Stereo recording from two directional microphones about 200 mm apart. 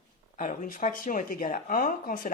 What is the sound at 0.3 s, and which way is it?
Speech, 40° left (ahead or behind).